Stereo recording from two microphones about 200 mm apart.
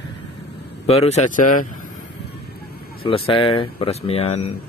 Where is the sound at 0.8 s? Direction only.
30° left (ahead or behind).